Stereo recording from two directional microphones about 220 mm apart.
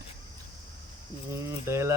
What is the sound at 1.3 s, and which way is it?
Speech, 10° right (ahead or behind).